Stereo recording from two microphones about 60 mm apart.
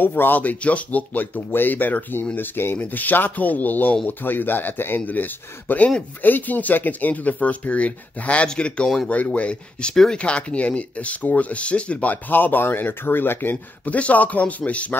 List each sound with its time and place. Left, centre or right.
0.0 s speech: left; by 9.1 s centre
9.1 s speech: left
13.9 s speech: left